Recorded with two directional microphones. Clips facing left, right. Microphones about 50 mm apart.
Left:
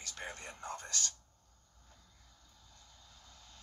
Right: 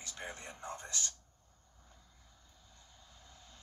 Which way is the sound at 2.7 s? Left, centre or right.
Right.